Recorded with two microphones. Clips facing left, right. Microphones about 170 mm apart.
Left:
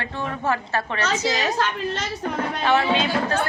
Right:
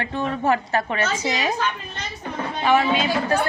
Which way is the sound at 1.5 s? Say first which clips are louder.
Left 3 dB; 85° left.